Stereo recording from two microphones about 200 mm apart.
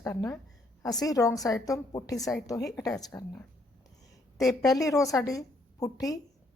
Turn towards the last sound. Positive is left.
turn(degrees=15)  # may be behind; listen again after turning